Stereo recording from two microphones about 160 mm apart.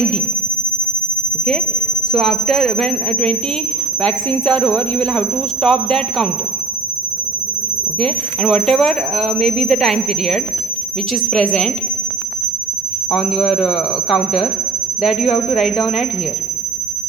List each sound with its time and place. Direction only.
2.1 s speech: centre (ahead or behind)
7.9 s speech: 5° left (ahead or behind)
13.1 s speech: centre (ahead or behind)
15.3 s speech: 35° left (ahead or behind)